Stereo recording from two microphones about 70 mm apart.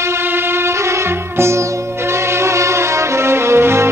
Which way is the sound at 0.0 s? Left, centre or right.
Right.